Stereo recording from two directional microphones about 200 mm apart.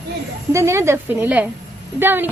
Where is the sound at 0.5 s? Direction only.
15° right (ahead or behind).